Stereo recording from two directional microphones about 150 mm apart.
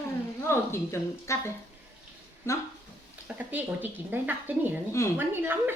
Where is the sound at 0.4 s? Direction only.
15° left (ahead or behind).